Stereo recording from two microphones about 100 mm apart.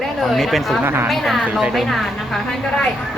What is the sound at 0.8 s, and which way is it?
Speech, 20° right (ahead or behind).